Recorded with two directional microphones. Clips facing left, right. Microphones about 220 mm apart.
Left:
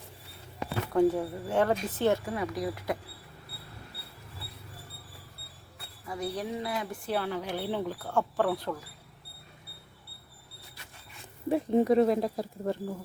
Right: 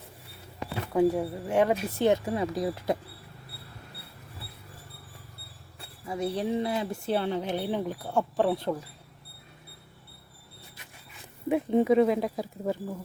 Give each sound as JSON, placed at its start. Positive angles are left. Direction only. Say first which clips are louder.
{"t": 0.9, "sound": "speech", "louder": "right 1 dB", "side_deg": -10}
{"t": 2.2, "sound": "speech", "louder": "right 3 dB", "side_deg": -25}
{"t": 6.1, "sound": "speech", "louder": "right 5 dB", "side_deg": -25}
{"t": 11.4, "sound": "speech", "louder": "right 1 dB", "side_deg": 0}